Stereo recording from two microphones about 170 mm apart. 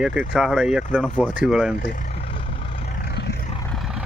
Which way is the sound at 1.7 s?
55° left (ahead or behind).